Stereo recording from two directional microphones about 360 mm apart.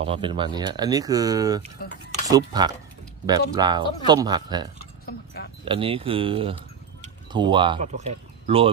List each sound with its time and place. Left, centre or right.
0.0 s speech: centre
5.0 s a sound: left
5.7 s speech: centre